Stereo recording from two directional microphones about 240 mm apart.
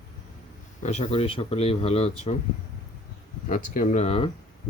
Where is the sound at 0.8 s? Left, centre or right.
Left.